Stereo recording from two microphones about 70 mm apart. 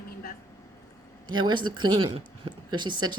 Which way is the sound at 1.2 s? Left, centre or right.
Right.